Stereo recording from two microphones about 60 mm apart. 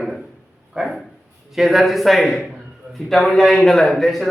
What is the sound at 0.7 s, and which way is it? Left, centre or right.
A man's voice, centre.